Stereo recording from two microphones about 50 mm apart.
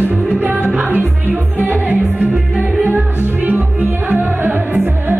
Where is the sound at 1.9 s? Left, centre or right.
Right.